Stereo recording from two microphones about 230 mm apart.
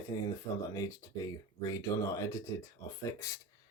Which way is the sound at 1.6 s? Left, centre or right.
Centre.